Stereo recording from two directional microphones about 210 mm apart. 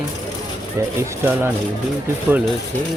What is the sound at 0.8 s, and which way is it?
Speech, 15° right (ahead or behind).